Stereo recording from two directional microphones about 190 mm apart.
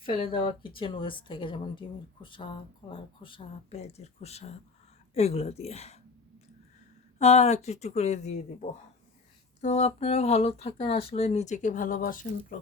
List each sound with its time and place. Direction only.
0.0 s a woman's voice: 30° left (ahead or behind)
7.2 s speech: 35° left (ahead or behind)
9.6 s speech: 35° left (ahead or behind)